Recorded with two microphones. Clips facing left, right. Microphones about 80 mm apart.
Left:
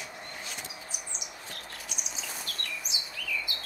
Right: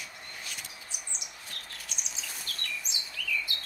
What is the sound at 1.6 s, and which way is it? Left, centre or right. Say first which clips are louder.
Bird vocalization: left 3 dB; centre.